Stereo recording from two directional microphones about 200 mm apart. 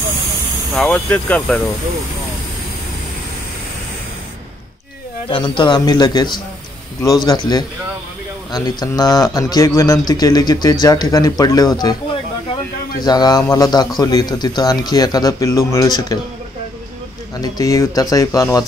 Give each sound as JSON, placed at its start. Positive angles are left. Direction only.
{"t": 0.7, "sound": "speech", "side_deg": 5}
{"t": 5.3, "sound": "speech", "side_deg": 25}
{"t": 13.0, "sound": "speech", "side_deg": 20}
{"t": 17.4, "sound": "speech", "side_deg": 15}